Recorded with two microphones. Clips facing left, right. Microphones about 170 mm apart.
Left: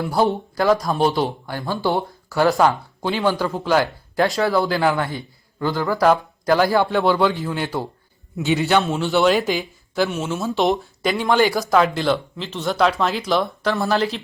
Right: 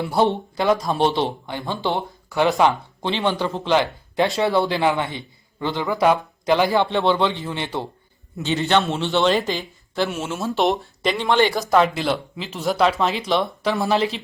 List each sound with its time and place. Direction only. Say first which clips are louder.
0.0 s speech: even; centre (ahead or behind)
1.5 s a man's voice: left 3 dB; 20° right (ahead or behind)
2.4 s speech: left 1 dB; centre (ahead or behind)
4.7 s a man's voice: left 1 dB; 20° right (ahead or behind)
5.6 s speech: left 2 dB; centre (ahead or behind)
6.4 s speech: left 1 dB; 20° right (ahead or behind)
6.9 s speech: left 2 dB; 5° left (ahead or behind)